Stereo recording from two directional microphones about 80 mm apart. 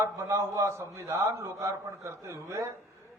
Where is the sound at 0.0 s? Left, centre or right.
Right.